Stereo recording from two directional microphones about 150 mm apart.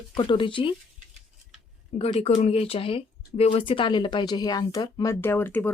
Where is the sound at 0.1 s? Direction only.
30° left (ahead or behind).